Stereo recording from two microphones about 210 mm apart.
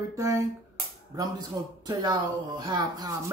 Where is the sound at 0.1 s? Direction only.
15° right (ahead or behind).